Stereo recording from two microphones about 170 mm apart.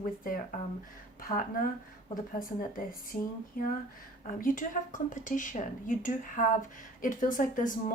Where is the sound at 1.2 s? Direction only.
55° left (ahead or behind).